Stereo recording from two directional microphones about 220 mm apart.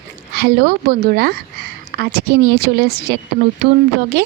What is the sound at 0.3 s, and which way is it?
A woman's voice, 45° right (ahead or behind).